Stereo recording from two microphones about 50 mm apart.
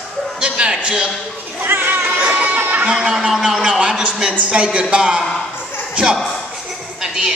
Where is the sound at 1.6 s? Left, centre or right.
Right.